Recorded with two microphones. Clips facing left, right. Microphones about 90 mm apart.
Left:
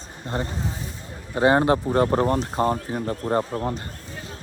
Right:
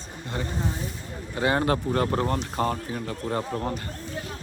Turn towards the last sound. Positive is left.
turn(degrees=20)  # may be behind; listen again after turning